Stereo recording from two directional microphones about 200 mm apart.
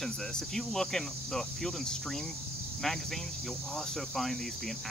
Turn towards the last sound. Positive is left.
turn(degrees=0)  # may be behind; listen again after turning